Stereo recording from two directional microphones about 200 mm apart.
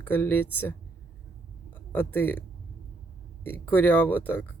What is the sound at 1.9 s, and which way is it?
Speech, 10° left (ahead or behind).